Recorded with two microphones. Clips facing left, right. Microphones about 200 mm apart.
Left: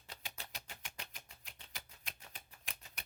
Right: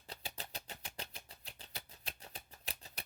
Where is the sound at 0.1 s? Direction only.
35° right (ahead or behind).